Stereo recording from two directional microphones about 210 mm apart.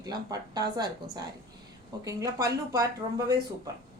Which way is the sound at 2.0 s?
15° right (ahead or behind).